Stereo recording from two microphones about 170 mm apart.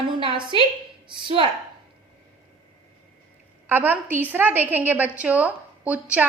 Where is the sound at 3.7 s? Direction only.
10° right (ahead or behind).